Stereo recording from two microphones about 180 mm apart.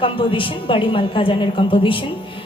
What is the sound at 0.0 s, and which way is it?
A woman's voice, 30° left (ahead or behind).